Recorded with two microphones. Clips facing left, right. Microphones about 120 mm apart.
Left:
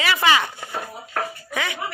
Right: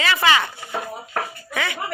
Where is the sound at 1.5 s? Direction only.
15° left (ahead or behind).